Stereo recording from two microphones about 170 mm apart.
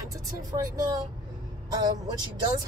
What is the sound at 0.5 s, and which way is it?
Speech, 30° right (ahead or behind).